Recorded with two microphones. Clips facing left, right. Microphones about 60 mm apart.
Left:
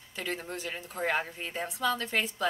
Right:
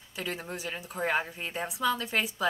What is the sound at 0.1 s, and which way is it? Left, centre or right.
A woman's voice, centre.